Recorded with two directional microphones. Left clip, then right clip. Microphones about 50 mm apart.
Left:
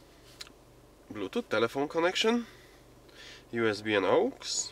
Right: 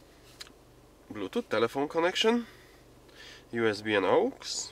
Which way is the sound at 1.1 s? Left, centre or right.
Centre.